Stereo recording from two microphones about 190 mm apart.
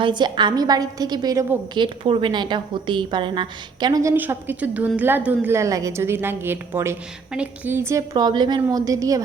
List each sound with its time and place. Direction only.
0.0 s a woman's voice: 25° right (ahead or behind)